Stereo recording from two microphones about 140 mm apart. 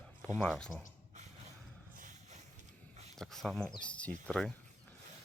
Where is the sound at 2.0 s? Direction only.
70° right (ahead or behind).